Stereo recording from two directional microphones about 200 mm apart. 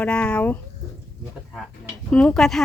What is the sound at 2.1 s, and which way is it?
Speech, 5° left (ahead or behind).